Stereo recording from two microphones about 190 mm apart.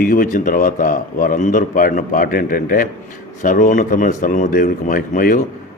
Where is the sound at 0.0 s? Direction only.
45° left (ahead or behind).